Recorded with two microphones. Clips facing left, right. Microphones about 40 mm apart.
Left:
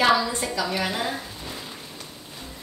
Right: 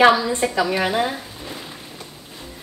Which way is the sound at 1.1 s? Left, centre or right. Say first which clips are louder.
Right 2 dB; centre.